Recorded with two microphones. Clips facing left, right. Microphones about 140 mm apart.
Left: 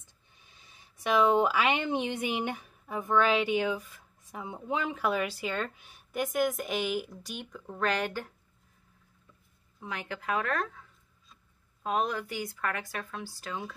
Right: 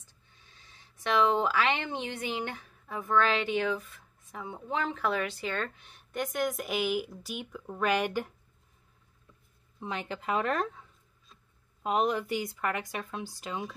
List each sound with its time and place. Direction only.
0.0 s speech: 15° left (ahead or behind); by 8.3 s 15° right (ahead or behind)
9.8 s speech: 25° right (ahead or behind)
11.8 s speech: 20° right (ahead or behind)